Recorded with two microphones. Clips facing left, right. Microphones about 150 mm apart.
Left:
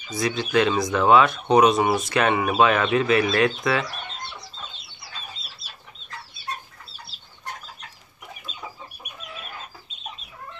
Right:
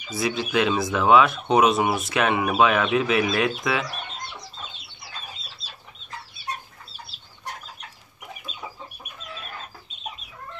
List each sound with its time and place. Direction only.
0.1 s speech: 5° right (ahead or behind)